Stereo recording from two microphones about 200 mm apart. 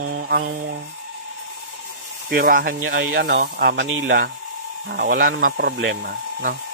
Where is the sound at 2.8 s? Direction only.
75° right (ahead or behind).